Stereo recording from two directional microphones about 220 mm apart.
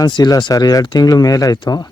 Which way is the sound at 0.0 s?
20° left (ahead or behind).